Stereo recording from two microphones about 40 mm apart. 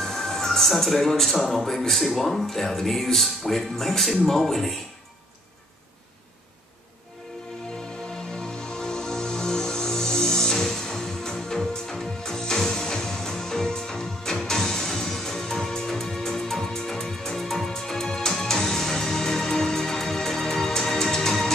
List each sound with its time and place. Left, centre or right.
0.0 s speech: centre
8.4 s music: centre